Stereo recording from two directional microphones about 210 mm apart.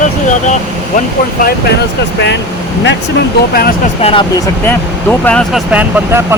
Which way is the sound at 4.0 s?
25° left (ahead or behind).